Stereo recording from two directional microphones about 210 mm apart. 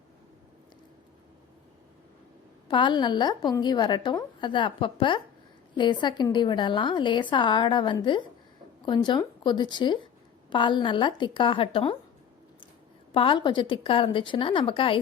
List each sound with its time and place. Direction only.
2.6 s a woman's voice: 20° left (ahead or behind)
13.1 s a woman's voice: 25° left (ahead or behind)